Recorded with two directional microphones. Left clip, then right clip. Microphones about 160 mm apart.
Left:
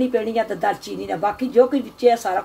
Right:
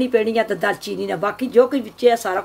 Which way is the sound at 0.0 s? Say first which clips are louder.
Right 3 dB; 50° right (ahead or behind).